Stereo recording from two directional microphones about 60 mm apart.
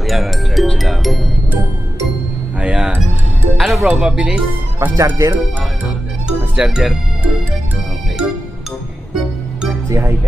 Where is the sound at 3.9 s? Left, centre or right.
Centre.